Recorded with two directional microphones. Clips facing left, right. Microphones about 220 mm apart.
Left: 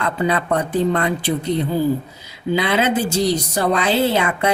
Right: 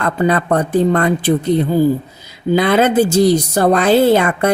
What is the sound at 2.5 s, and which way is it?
Speech, 50° right (ahead or behind).